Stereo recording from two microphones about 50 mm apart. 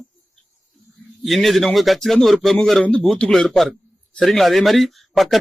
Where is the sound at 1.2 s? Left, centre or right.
Centre.